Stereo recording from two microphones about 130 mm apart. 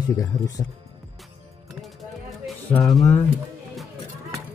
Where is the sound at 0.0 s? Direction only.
30° left (ahead or behind).